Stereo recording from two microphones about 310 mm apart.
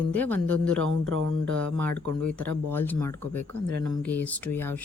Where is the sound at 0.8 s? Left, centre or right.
Right.